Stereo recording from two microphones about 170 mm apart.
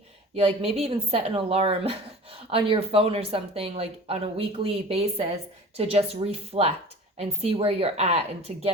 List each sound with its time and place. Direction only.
0.3 s speech: 35° right (ahead or behind)